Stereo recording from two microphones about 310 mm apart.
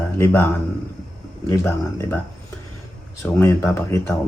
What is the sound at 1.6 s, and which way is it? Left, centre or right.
Speech, centre.